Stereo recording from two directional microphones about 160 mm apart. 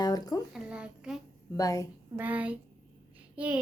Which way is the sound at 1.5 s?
20° left (ahead or behind).